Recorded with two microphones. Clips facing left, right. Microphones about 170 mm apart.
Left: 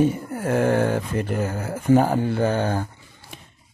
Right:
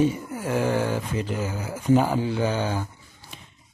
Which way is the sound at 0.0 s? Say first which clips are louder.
Left 2 dB; 55° left (ahead or behind).